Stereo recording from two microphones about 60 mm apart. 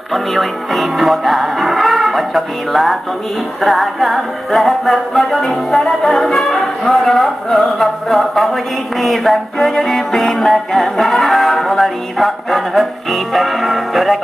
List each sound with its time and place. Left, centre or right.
0.1 s music: centre